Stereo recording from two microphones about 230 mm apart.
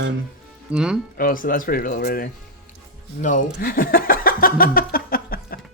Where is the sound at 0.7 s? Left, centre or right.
Centre.